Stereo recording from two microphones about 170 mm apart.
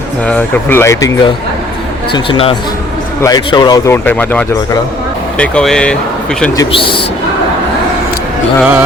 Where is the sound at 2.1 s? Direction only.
30° left (ahead or behind).